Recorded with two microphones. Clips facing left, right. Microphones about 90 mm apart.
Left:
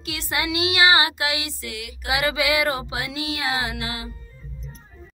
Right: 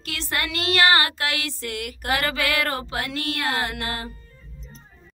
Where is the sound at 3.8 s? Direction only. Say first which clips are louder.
Right 1 dB; 50° right (ahead or behind).